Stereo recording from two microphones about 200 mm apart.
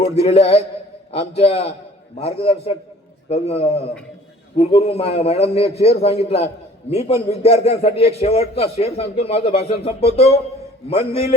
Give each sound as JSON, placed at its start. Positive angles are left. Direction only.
{"t": 0.2, "sound": "a man's voice", "side_deg": 30}